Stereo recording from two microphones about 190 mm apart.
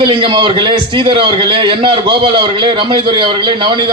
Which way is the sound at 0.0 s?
25° right (ahead or behind).